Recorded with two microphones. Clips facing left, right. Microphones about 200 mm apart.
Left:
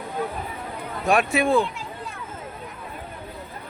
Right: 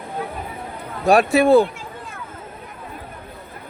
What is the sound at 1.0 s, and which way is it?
Speech, 35° right (ahead or behind).